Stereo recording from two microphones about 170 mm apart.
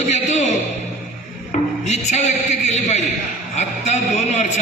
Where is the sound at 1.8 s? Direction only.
40° left (ahead or behind).